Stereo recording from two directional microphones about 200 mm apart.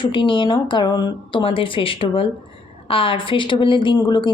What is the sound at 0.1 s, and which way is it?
A woman's voice, 25° left (ahead or behind).